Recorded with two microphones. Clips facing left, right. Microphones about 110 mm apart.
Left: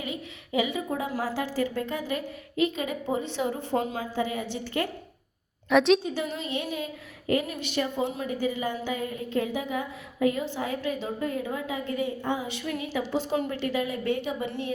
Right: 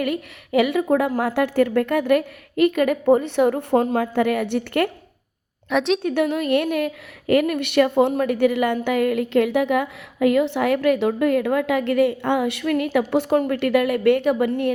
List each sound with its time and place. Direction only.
0.0 s a woman's voice: 65° right (ahead or behind)
5.6 s a woman's voice: centre (ahead or behind)
6.0 s a woman's voice: 60° right (ahead or behind)